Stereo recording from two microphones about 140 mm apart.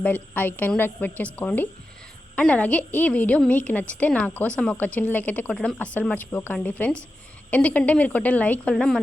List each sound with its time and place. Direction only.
0.0 s a woman's voice: 10° left (ahead or behind)